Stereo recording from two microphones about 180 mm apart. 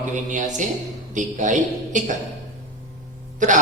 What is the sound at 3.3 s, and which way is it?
Speech, 45° right (ahead or behind).